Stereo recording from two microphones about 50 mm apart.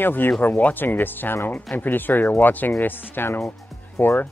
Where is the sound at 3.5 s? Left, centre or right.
Left.